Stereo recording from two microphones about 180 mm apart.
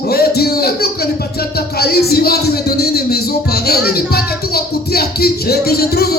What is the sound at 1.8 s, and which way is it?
Music, 60° left (ahead or behind).